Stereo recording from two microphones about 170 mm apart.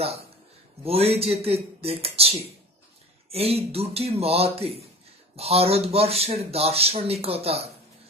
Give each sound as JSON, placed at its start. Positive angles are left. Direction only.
{"t": 0.8, "sound": "a man's voice", "side_deg": -35}